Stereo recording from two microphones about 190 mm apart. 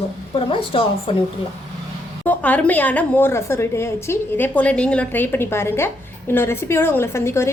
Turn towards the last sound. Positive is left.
turn(degrees=15)  # may be behind; listen again after turning